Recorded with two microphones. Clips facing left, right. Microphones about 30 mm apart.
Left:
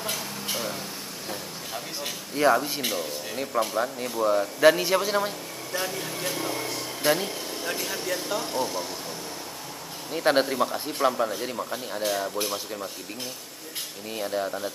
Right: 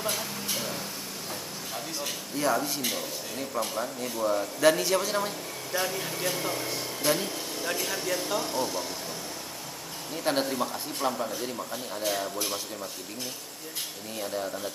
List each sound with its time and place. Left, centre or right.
0.1 s a sound: centre
2.3 s a man's voice: left
5.7 s speech: centre
7.0 s speech: centre
7.6 s speech: centre
10.1 s speech: left
14.1 s speech: centre